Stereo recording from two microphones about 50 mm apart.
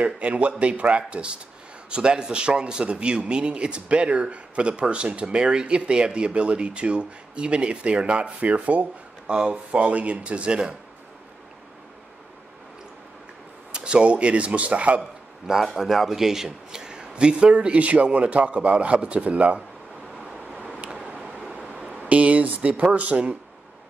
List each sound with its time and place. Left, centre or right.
0.0 s speech: right
9.3 s speech: centre
9.7 s speech: right
13.7 s speech: centre
15.0 s speech: centre; by 19.6 s right
20.8 s a sound: right
22.0 s speech: right